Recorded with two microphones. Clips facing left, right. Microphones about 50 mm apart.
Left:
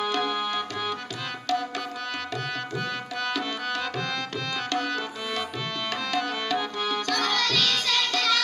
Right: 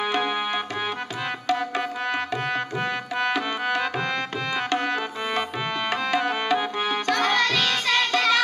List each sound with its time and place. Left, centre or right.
0.0 s music: right
1.5 s tabla: right
2.3 s music: right